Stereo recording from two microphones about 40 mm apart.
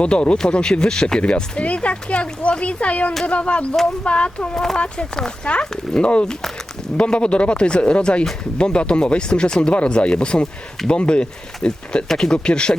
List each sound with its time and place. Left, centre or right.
0.0 s speech: left
4.5 s speech: centre
5.5 s speech: left
12.0 s speech: centre